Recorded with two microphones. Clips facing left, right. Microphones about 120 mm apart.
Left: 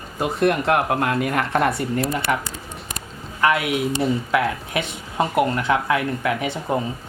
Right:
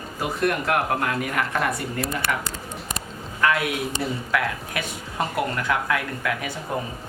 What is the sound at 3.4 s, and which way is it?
Speech, 20° left (ahead or behind).